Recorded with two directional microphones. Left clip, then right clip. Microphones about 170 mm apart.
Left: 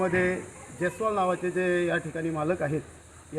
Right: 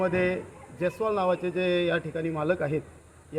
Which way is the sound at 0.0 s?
40° right (ahead or behind).